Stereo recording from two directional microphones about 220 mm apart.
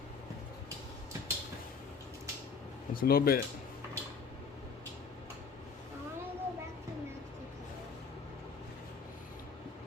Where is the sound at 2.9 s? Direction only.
40° left (ahead or behind).